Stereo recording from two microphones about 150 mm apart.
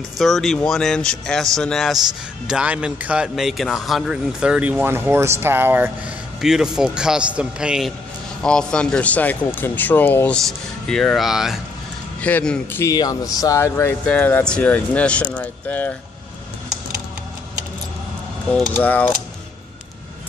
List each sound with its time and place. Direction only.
0.2 s a man's voice: centre (ahead or behind)
8.4 s speech: 5° left (ahead or behind)
12.2 s speech: 10° left (ahead or behind)
12.9 s speech: 25° left (ahead or behind)
18.7 s speech: 10° left (ahead or behind)